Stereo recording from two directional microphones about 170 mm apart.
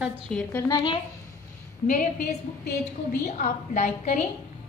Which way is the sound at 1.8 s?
50° left (ahead or behind).